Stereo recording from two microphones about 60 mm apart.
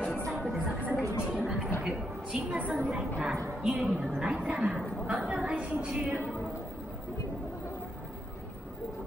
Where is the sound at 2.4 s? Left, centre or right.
Right.